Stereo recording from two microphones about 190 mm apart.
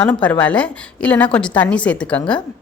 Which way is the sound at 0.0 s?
5° left (ahead or behind).